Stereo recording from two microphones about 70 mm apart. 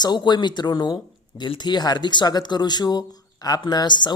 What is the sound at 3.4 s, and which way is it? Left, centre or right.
Speech, left.